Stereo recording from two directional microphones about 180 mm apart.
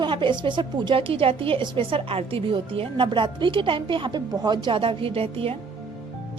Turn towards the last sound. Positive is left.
turn(degrees=-30)  # may be behind; listen again after turning